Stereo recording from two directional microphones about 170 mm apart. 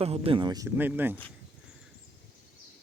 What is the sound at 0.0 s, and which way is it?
Speech, 35° right (ahead or behind).